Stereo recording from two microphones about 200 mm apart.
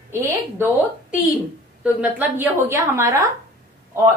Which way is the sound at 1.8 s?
10° right (ahead or behind).